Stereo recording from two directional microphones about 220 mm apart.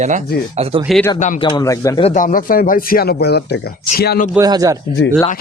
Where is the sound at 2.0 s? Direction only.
35° left (ahead or behind).